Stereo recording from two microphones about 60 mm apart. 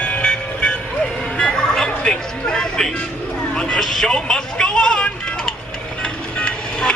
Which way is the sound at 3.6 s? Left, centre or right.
Centre.